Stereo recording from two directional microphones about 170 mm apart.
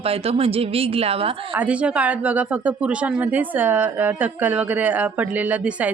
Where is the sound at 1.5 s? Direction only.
10° right (ahead or behind).